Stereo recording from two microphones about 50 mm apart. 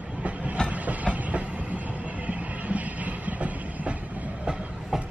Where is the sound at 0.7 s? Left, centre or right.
Right.